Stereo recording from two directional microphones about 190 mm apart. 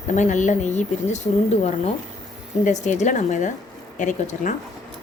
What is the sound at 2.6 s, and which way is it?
A woman's voice, 40° left (ahead or behind).